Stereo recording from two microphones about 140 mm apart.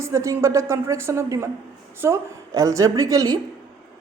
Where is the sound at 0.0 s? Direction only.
20° right (ahead or behind).